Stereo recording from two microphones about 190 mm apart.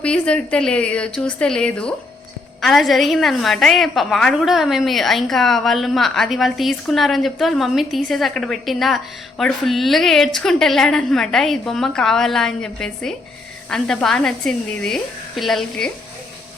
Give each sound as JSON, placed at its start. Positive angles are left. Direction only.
{"t": 0.0, "sound": "a woman's voice", "side_deg": 5}